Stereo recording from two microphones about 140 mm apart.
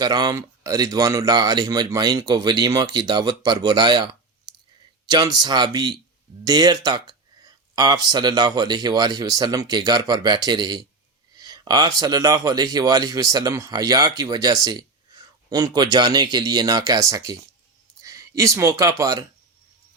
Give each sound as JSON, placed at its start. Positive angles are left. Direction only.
{"t": 0.0, "sound": "speech", "side_deg": -30}